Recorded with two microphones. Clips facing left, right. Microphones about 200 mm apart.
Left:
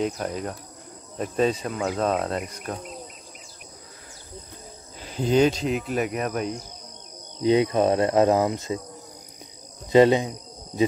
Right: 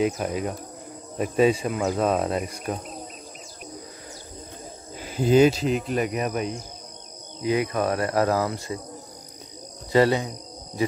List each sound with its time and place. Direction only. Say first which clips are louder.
0.0 s speech: right 3 dB; 5° right (ahead or behind)
5.1 s speech: right 2 dB; 5° right (ahead or behind)
7.4 s speech: left 4 dB; 25° left (ahead or behind)
9.9 s speech: left 3 dB; 20° left (ahead or behind)